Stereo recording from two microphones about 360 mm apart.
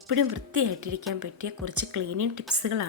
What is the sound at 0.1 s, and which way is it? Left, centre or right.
A woman's voice, right.